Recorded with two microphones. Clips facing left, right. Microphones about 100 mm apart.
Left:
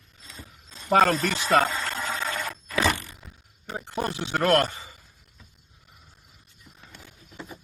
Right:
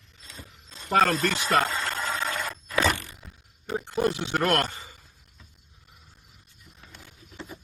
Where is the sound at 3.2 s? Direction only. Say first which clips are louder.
Even; centre (ahead or behind).